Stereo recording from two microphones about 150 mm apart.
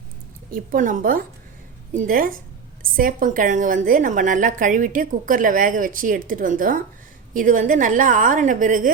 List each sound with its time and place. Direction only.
0.5 s a woman's voice: 65° right (ahead or behind)